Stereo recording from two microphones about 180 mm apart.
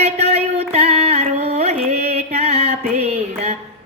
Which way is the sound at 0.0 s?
35° right (ahead or behind).